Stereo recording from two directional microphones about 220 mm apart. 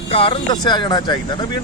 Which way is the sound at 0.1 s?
25° left (ahead or behind).